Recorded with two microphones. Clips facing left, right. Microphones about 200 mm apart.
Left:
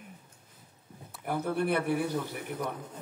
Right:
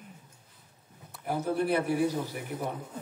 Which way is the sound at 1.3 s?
60° left (ahead or behind).